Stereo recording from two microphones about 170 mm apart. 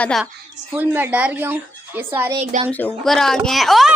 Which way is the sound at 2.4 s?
40° right (ahead or behind).